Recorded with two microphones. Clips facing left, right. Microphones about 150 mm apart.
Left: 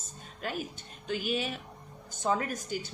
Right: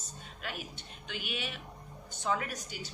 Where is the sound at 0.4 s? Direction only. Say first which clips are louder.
Left 6 dB; 40° left (ahead or behind).